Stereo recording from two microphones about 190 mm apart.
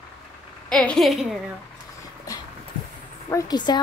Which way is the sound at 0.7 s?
5° left (ahead or behind).